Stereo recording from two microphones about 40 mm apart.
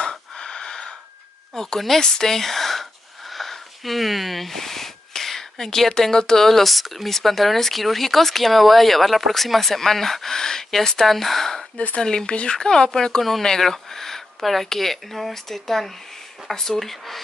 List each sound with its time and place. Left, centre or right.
0.0 s a sound: centre
1.5 s speech: centre
11.7 s speech: left
12.0 s speech: centre
12.3 s speech: left
12.5 s speech: centre